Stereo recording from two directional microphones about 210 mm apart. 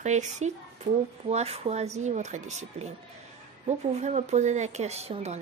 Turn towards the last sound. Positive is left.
turn(degrees=-30)  # may be behind; listen again after turning